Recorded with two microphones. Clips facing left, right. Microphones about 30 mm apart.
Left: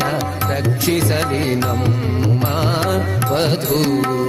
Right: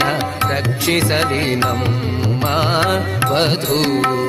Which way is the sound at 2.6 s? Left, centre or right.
Right.